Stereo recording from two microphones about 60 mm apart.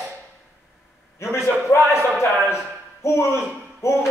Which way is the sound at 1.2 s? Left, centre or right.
Left.